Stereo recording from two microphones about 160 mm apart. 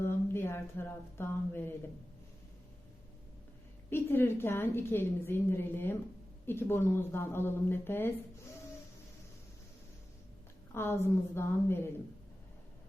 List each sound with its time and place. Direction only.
0.0 s speech: 15° left (ahead or behind)
3.8 s a woman's voice: 15° left (ahead or behind)
10.8 s a woman's voice: 15° left (ahead or behind)